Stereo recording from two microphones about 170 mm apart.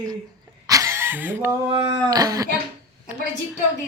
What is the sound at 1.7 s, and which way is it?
Speech, 25° right (ahead or behind).